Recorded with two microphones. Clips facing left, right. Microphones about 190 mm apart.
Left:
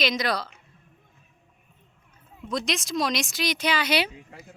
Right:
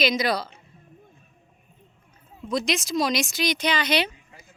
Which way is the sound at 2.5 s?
Centre (ahead or behind).